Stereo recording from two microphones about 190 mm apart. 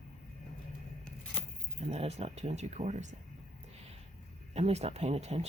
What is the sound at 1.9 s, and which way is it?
Speech, 35° right (ahead or behind).